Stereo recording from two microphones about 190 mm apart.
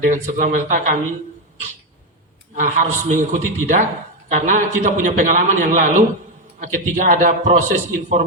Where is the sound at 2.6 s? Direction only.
40° right (ahead or behind).